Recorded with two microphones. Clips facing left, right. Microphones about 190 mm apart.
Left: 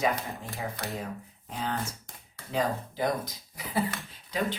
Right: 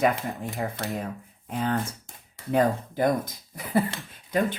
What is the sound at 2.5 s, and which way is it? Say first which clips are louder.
Speech: right 6 dB; 50° right (ahead or behind).